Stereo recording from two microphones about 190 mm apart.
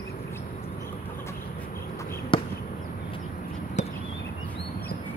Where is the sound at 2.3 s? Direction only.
25° left (ahead or behind).